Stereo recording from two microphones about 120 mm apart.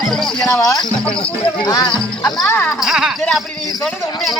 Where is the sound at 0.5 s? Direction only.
30° left (ahead or behind).